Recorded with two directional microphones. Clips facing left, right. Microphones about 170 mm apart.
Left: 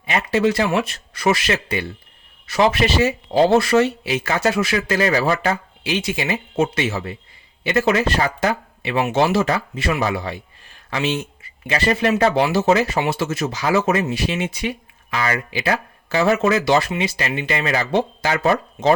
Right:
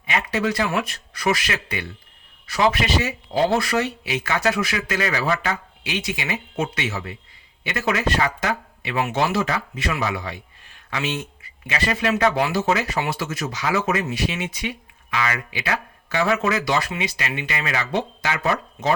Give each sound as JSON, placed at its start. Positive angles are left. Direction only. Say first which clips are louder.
{"t": 0.1, "sound": "speech", "louder": "left 5 dB", "side_deg": 30}